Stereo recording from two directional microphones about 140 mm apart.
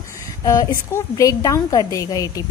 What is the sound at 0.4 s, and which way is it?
A woman's voice, 25° left (ahead or behind).